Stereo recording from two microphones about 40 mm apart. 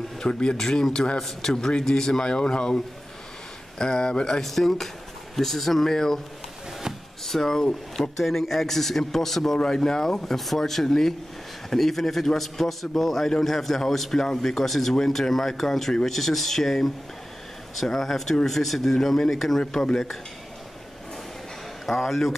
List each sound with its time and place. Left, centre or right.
0.2 s a man's voice: left
7.2 s a man's voice: centre
21.8 s a man's voice: centre